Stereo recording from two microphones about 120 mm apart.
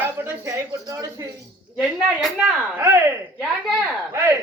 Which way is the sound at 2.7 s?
20° right (ahead or behind).